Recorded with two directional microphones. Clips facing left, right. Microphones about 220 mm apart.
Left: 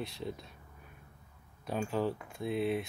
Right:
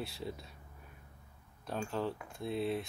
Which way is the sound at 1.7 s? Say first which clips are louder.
Left 4 dB; 5° left (ahead or behind).